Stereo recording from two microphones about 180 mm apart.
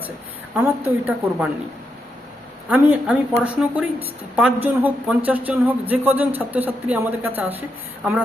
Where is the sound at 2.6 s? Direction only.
10° right (ahead or behind).